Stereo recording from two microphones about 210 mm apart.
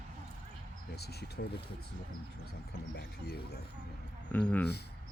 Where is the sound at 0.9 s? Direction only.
50° left (ahead or behind).